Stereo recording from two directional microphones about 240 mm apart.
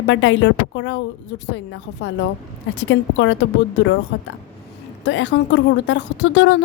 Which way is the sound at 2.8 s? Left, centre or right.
Left.